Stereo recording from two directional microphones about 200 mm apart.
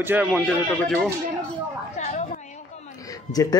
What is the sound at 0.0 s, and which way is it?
Speech, 10° right (ahead or behind).